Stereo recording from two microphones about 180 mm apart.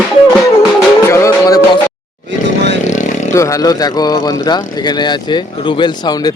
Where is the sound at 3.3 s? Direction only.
15° left (ahead or behind).